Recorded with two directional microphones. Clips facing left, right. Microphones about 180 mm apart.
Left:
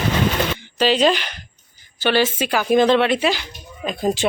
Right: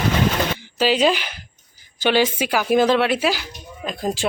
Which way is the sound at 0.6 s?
10° right (ahead or behind).